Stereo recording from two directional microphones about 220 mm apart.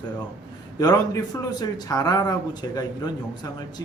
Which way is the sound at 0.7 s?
15° left (ahead or behind).